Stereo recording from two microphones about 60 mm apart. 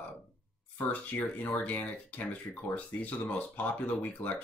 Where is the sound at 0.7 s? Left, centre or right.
Left.